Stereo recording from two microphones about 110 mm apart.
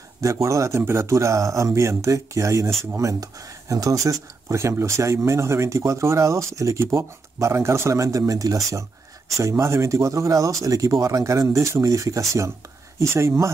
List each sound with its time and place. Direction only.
0.2 s speech: 30° right (ahead or behind)